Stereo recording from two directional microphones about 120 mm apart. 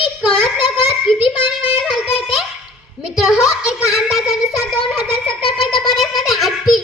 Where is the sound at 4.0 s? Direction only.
Centre (ahead or behind).